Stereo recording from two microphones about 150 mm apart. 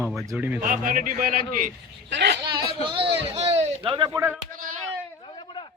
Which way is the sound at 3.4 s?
45° right (ahead or behind).